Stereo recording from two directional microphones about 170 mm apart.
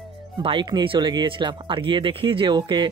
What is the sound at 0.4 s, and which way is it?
Speech, 30° right (ahead or behind).